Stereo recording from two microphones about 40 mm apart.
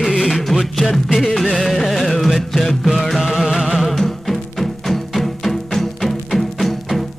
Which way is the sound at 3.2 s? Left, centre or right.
Centre.